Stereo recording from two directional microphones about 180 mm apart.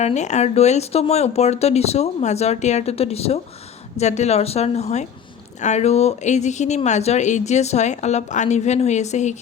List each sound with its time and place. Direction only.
0.0 s speech: 40° left (ahead or behind)